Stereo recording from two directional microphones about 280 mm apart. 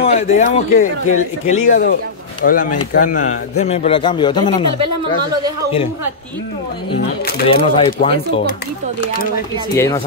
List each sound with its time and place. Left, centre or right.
0.0 s speech: left
7.4 s speech: centre
9.0 s speech: left
9.8 s speech: centre